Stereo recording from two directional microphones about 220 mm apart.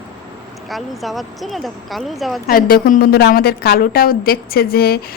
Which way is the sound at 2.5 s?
40° left (ahead or behind).